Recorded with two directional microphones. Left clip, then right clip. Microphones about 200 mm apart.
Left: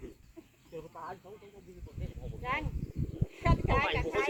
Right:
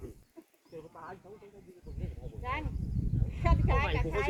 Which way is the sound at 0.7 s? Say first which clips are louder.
Left 3 dB; 40° left (ahead or behind).